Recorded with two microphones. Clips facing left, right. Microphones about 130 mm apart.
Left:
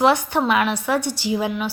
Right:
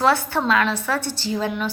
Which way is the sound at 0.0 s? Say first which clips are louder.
Left 2 dB; 15° left (ahead or behind).